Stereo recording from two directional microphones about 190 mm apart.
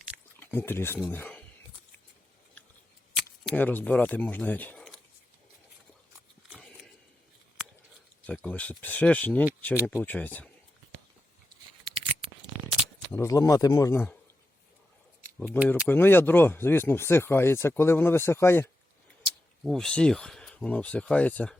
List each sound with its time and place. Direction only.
0.3 s speech: 10° left (ahead or behind)
3.2 s speech: 5° left (ahead or behind)
6.5 s a sound: 5° left (ahead or behind)
8.3 s speech: 5° left (ahead or behind)
11.9 s scissors: 30° right (ahead or behind)
13.1 s speech: 15° left (ahead or behind)
15.4 s speech: 10° right (ahead or behind)
15.9 s speech: 10° left (ahead or behind)